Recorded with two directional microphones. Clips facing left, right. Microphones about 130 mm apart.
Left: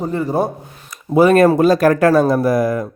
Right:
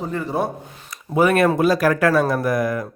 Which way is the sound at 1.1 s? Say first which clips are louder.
Left 6 dB; 30° left (ahead or behind).